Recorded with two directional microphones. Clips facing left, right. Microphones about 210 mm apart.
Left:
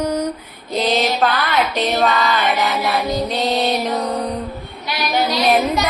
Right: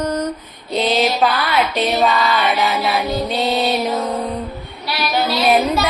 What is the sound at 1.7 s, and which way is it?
Music, centre (ahead or behind).